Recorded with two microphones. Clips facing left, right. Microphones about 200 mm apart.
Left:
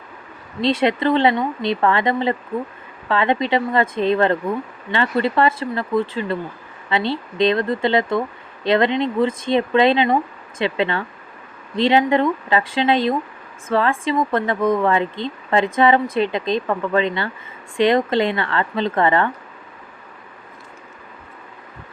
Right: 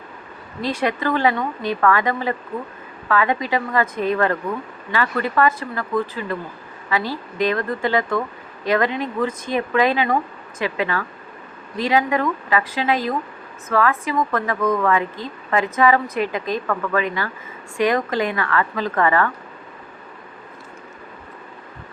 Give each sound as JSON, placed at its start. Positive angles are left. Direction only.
{"t": 0.6, "sound": "speech", "side_deg": 25}